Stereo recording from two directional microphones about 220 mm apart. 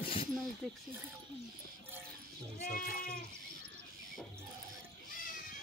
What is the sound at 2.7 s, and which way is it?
Goat, 40° left (ahead or behind).